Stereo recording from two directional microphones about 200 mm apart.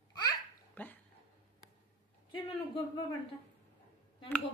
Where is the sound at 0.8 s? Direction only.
10° left (ahead or behind).